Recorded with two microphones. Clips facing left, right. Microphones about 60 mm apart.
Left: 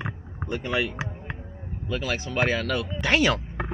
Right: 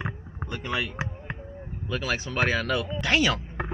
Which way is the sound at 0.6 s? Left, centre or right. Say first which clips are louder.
Left 3 dB; centre.